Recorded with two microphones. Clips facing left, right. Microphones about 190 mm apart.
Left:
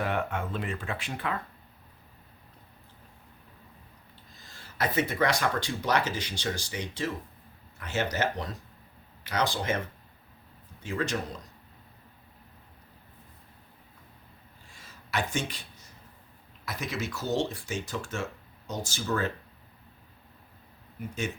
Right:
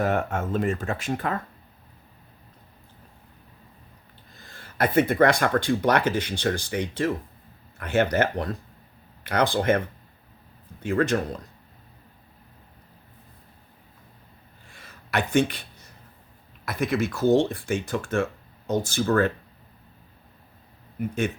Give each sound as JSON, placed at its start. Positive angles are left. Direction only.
{"t": 0.0, "sound": "speech", "side_deg": -45}
{"t": 4.4, "sound": "speech", "side_deg": -55}
{"t": 10.8, "sound": "speech", "side_deg": -55}
{"t": 14.7, "sound": "a sound", "side_deg": -60}
{"t": 16.6, "sound": "speech", "side_deg": -55}